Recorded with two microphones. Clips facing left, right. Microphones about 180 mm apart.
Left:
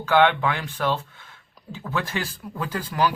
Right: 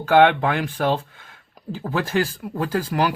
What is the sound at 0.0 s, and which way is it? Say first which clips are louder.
Speech: right 4 dB; 55° right (ahead or behind).